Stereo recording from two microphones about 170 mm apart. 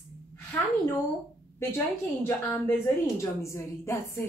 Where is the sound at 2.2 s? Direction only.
15° left (ahead or behind).